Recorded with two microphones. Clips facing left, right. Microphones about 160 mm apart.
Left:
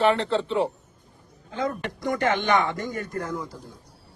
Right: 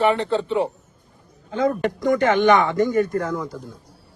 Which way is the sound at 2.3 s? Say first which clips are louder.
Right 8 dB; 55° right (ahead or behind).